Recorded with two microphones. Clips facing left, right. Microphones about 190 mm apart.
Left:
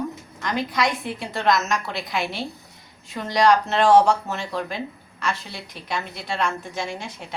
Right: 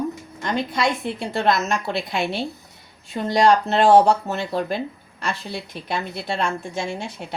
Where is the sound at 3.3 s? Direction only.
30° right (ahead or behind).